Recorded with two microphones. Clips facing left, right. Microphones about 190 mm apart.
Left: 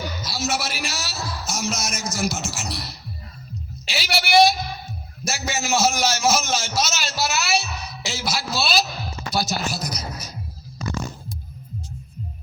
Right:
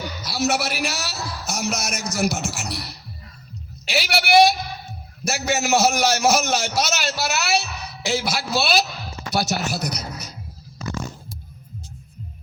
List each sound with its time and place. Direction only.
0.2 s a man's voice: 60° right (ahead or behind)